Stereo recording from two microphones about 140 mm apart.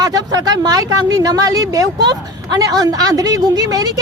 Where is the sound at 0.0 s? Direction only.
30° right (ahead or behind).